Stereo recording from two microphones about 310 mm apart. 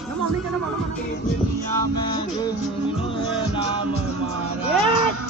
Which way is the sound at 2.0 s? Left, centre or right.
Centre.